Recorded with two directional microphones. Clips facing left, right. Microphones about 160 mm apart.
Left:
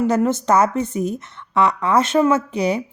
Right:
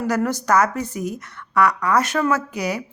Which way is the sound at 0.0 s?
20° left (ahead or behind).